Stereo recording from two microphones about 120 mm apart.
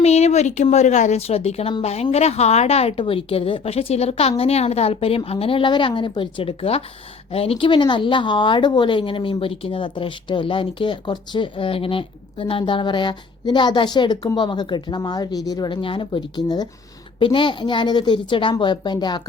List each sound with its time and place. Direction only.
0.0 s a woman's voice: 65° left (ahead or behind)
3.0 s a woman's voice: 50° left (ahead or behind)